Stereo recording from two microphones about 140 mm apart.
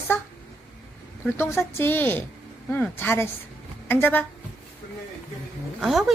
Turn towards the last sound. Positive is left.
turn(degrees=0)  # may be behind; listen again after turning